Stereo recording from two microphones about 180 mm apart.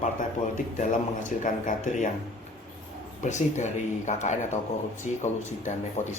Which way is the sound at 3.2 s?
40° left (ahead or behind).